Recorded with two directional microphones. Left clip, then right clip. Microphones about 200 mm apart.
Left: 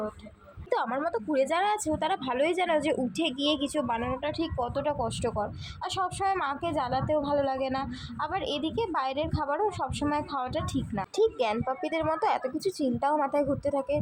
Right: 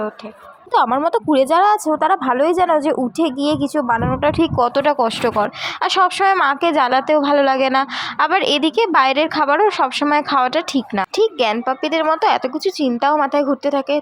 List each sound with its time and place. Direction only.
0.7 s a woman's voice: 30° right (ahead or behind)